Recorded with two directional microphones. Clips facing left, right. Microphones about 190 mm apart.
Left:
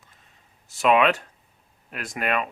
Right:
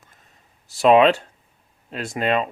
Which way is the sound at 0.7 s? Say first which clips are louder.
Right 5 dB; 30° right (ahead or behind).